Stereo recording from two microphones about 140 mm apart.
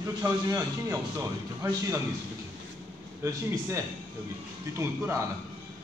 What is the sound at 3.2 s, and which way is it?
Speech, 20° right (ahead or behind).